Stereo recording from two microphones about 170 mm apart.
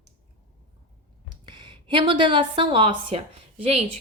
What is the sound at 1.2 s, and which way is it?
A woman's voice, 30° right (ahead or behind).